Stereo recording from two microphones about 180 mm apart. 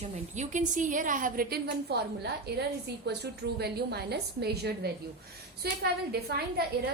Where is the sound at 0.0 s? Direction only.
40° right (ahead or behind); by 6.7 s 65° right (ahead or behind).